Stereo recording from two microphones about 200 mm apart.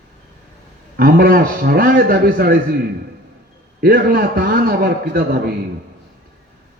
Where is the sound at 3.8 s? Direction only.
45° right (ahead or behind).